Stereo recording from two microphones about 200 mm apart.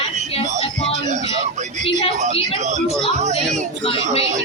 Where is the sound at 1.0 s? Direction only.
35° right (ahead or behind).